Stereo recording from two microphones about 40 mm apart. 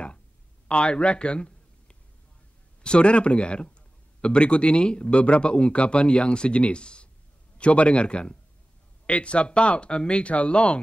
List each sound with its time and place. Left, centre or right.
0.7 s a man's voice: left